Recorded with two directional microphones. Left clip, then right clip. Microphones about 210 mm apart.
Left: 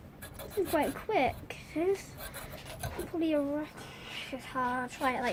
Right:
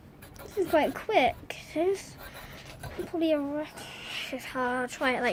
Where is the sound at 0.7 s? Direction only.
45° right (ahead or behind).